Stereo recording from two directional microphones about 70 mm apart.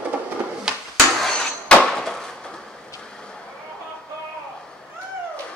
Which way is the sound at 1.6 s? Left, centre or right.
Centre.